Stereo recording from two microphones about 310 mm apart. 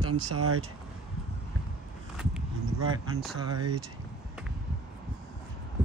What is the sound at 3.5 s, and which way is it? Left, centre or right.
Speech, right.